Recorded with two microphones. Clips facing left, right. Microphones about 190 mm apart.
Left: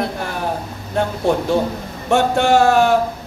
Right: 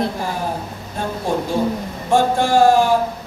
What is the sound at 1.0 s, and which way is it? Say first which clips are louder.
A man's voice: left 4 dB; 70° left (ahead or behind).